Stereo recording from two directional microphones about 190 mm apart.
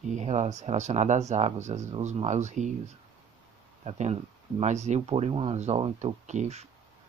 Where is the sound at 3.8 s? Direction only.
35° right (ahead or behind).